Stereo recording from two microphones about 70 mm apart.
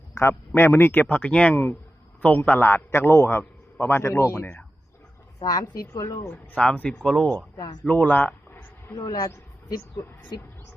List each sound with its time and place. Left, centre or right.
0.1 s a man's voice: left
5.4 s a woman's voice: left
6.2 s speech: centre
7.5 s a man's voice: left
7.9 s a sound: left
10.0 s a man's voice: left